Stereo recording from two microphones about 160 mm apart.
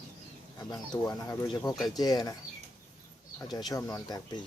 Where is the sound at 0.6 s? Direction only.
25° left (ahead or behind).